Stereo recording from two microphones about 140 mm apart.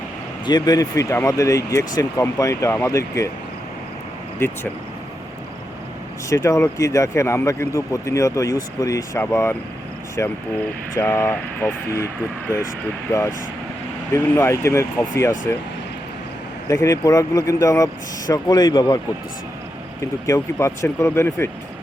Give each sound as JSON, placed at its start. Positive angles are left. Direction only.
{"t": 0.4, "sound": "speech", "side_deg": 30}
{"t": 6.2, "sound": "speech", "side_deg": 25}
{"t": 14.1, "sound": "speech", "side_deg": 20}
{"t": 16.6, "sound": "speech", "side_deg": 25}
{"t": 20.2, "sound": "speech", "side_deg": 20}